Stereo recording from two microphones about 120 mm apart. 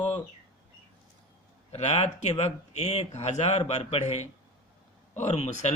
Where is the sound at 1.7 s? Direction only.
60° left (ahead or behind).